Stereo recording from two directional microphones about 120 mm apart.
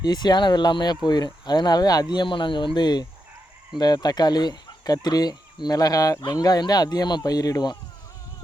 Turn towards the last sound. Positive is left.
turn(degrees=30)  # may be behind; listen again after turning